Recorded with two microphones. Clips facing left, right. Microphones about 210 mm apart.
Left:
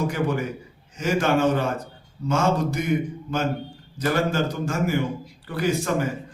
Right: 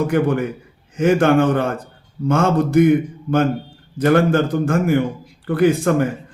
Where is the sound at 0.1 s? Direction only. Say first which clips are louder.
Right 7 dB; 55° right (ahead or behind).